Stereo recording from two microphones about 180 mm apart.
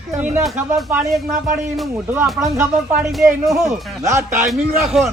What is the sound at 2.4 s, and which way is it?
Speech, 10° right (ahead or behind).